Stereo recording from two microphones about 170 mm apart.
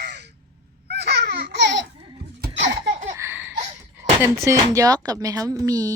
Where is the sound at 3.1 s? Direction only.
15° right (ahead or behind).